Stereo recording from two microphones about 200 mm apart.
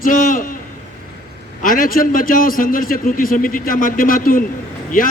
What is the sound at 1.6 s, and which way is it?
A man's voice, 45° left (ahead or behind).